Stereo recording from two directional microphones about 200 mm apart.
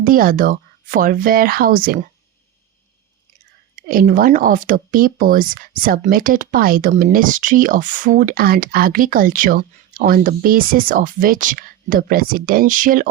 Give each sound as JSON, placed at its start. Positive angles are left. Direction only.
{"t": 0.0, "sound": "speech", "side_deg": -45}
{"t": 3.8, "sound": "speech", "side_deg": -45}